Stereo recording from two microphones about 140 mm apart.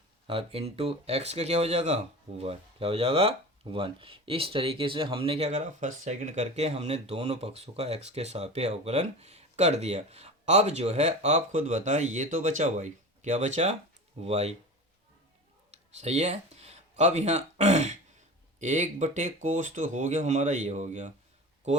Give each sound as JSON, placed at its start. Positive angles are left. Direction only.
{"t": 0.3, "sound": "speech", "side_deg": -45}
{"t": 15.7, "sound": "speech", "side_deg": -50}